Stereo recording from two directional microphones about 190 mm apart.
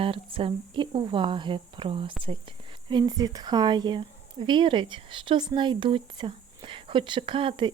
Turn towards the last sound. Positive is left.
turn(degrees=-25)  # may be behind; listen again after turning